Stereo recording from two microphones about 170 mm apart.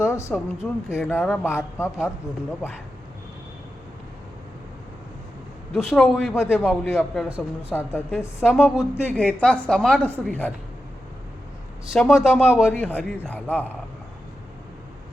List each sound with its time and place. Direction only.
0.0 s speech: 15° left (ahead or behind)
5.7 s a woman's voice: centre (ahead or behind)
6.3 s speech: 15° left (ahead or behind)
7.2 s speech: 5° right (ahead or behind)
7.9 s speech: 15° left (ahead or behind)
8.7 s a woman's voice: 5° right (ahead or behind)
9.0 s a woman's voice: 5° left (ahead or behind)
11.9 s a woman's voice: centre (ahead or behind)
12.7 s speech: 10° left (ahead or behind)